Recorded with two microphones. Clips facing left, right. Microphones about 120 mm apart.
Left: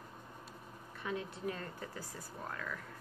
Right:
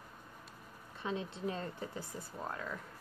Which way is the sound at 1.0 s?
25° right (ahead or behind).